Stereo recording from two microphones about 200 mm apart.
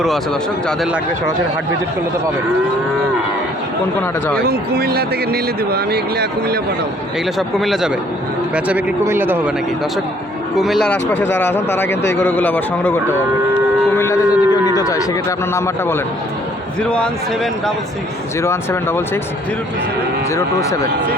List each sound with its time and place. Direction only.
4.4 s speech: 50° right (ahead or behind)
7.3 s speech: centre (ahead or behind)
10.6 s speech: centre (ahead or behind)
13.9 s a sound: 15° left (ahead or behind)
14.8 s speech: 15° left (ahead or behind)
20.3 s speech: 15° left (ahead or behind)